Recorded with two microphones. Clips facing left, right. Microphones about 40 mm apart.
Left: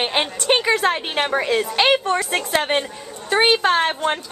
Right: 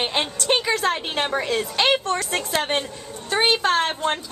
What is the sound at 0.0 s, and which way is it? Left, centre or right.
A woman's voice, centre.